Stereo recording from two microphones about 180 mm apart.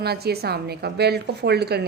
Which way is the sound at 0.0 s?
60° right (ahead or behind).